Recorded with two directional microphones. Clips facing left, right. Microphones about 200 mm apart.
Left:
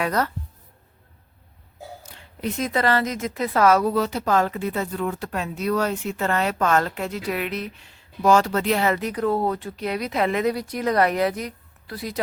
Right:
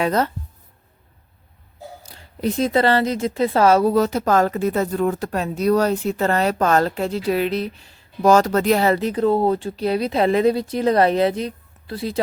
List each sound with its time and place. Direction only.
0.0 s speech: 25° right (ahead or behind)
2.0 s a woman's voice: 35° right (ahead or behind)
3.9 s speech: 45° right (ahead or behind); by 12.2 s 25° right (ahead or behind)